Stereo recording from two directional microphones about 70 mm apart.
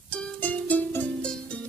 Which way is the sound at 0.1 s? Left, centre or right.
Centre.